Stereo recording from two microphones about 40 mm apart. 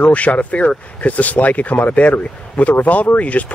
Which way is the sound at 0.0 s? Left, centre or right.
Left.